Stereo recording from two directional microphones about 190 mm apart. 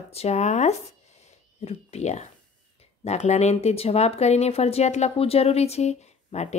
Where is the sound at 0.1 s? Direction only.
35° left (ahead or behind).